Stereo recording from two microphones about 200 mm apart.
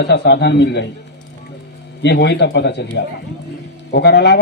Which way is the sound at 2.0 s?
55° left (ahead or behind).